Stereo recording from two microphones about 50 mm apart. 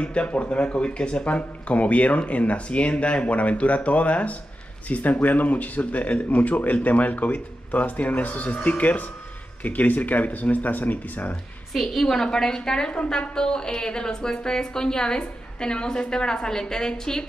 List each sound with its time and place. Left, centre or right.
0.0 s speech: left
11.7 s a woman's voice: centre